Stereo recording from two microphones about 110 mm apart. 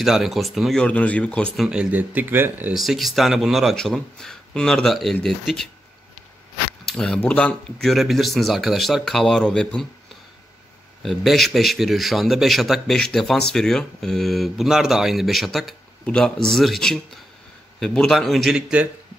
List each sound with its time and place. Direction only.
0.0 s speech: centre (ahead or behind)
0.8 s speech: 10° left (ahead or behind)
1.7 s speech: 10° right (ahead or behind)
2.7 s speech: centre (ahead or behind)
6.9 s speech: 5° left (ahead or behind)
7.9 s speech: centre (ahead or behind)
11.0 s speech: centre (ahead or behind)